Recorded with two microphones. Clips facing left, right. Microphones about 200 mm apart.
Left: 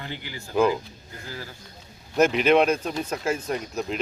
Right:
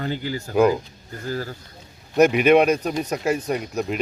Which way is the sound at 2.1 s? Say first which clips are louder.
Right 4 dB; 15° right (ahead or behind).